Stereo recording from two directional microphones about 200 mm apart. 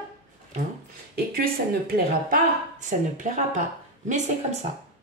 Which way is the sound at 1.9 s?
40° right (ahead or behind).